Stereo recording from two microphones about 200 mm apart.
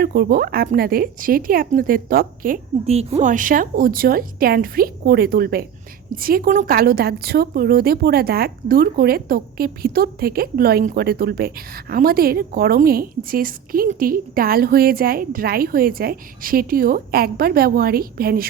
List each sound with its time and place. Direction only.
0.0 s a woman's voice: 50° right (ahead or behind)